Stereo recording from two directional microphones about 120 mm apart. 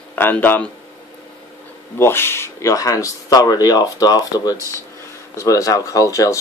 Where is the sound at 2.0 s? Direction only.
20° left (ahead or behind).